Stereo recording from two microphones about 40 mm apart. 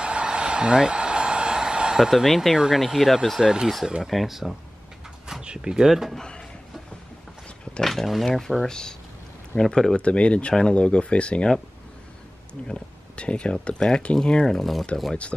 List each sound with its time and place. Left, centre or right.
0.0 s a sound: right
2.0 s speech: centre
2.2 s speech: centre
5.4 s speech: right
5.9 s speech: centre
6.1 s speech: left
7.8 s speech: centre
9.9 s speech: left
12.6 s speech: left
13.7 s speech: centre